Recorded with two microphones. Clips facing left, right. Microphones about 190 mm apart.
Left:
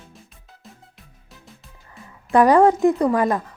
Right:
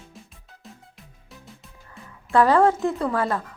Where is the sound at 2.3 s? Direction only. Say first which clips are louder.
Left 4 dB; 15° left (ahead or behind).